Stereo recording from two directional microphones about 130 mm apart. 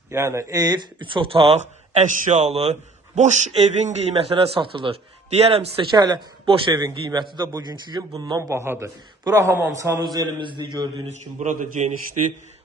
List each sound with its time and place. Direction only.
0.1 s speech: 25° right (ahead or behind); by 1.5 s 45° right (ahead or behind)
1.5 s speech: 60° right (ahead or behind); by 4.9 s 40° right (ahead or behind)
5.3 s a man's voice: 50° right (ahead or behind); by 9.9 s 20° right (ahead or behind)
10.2 s speech: 35° right (ahead or behind)
11.1 s a man's voice: 70° right (ahead or behind)